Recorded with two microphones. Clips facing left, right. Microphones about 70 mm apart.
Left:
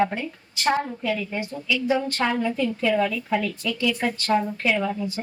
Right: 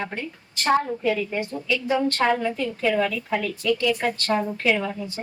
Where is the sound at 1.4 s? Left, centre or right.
Centre.